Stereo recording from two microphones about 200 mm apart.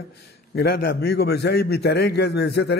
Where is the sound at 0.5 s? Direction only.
50° left (ahead or behind).